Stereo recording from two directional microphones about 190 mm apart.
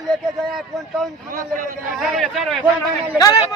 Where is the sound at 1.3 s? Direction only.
45° right (ahead or behind).